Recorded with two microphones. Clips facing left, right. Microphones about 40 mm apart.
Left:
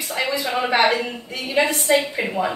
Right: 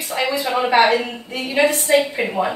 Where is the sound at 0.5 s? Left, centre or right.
Centre.